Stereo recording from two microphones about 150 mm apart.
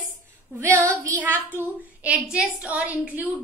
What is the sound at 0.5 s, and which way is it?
A child's voice, 15° right (ahead or behind).